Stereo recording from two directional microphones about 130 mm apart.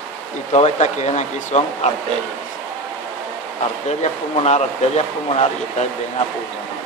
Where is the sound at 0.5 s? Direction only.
60° left (ahead or behind).